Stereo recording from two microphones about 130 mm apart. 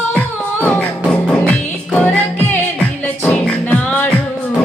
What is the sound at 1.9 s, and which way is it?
Music, 15° left (ahead or behind).